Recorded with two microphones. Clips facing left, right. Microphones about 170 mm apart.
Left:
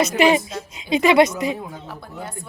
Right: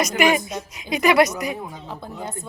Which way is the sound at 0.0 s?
30° left (ahead or behind).